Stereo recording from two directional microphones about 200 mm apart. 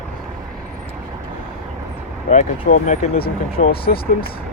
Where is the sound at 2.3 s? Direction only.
40° left (ahead or behind).